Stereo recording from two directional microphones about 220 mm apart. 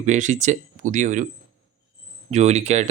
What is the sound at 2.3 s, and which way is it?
Speech, 30° right (ahead or behind).